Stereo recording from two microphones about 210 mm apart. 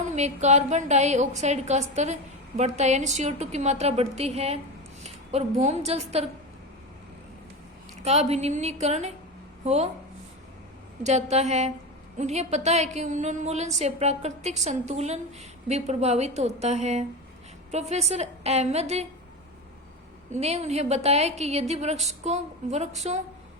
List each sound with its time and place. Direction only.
0.0 s a woman's voice: 35° right (ahead or behind)
8.0 s a woman's voice: 30° right (ahead or behind)
11.0 s a woman's voice: 30° right (ahead or behind)
20.3 s a woman's voice: 30° right (ahead or behind)